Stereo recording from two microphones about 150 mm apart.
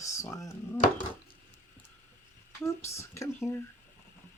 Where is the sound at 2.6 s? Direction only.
20° left (ahead or behind).